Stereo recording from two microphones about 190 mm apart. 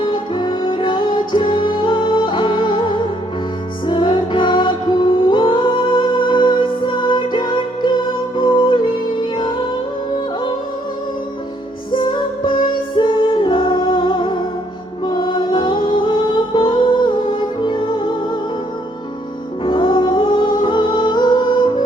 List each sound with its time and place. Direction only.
0.3 s music: 25° left (ahead or behind)
11.9 s music: 25° left (ahead or behind)
19.6 s music: 25° left (ahead or behind)